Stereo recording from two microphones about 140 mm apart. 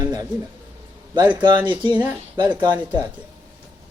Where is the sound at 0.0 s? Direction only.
25° right (ahead or behind).